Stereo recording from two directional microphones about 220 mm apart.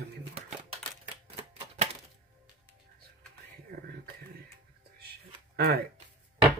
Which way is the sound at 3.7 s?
40° right (ahead or behind).